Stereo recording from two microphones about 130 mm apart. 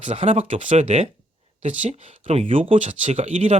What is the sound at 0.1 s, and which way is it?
Speech, 50° right (ahead or behind).